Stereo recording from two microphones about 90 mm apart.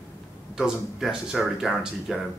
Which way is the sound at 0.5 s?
10° right (ahead or behind).